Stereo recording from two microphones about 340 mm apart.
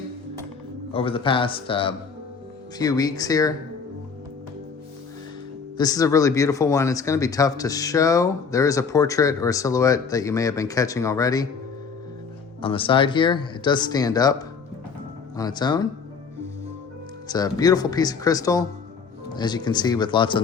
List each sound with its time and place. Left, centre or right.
0.9 s speech: centre
5.7 s speech: centre
12.6 s speech: centre
17.2 s speech: centre